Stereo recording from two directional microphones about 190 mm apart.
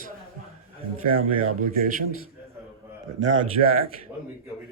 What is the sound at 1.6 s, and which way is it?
Speech, 45° right (ahead or behind).